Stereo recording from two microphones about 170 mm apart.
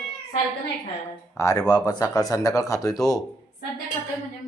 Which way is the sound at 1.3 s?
20° left (ahead or behind).